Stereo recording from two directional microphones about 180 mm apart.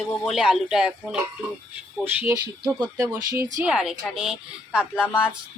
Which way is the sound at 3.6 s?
5° right (ahead or behind).